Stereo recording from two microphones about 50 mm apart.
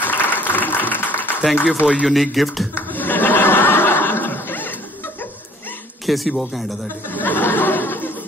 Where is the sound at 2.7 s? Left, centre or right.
Left.